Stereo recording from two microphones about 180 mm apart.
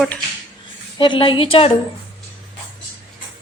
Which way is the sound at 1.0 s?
25° left (ahead or behind).